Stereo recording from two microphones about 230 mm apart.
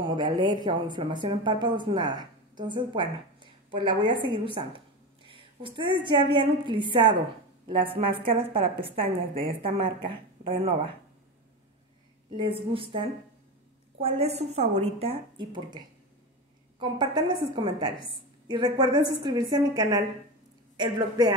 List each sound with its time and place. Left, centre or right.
0.0 s a woman's voice: centre
12.3 s a woman's voice: right